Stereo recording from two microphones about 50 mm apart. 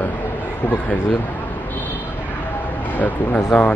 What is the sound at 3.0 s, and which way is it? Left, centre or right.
Speech, left.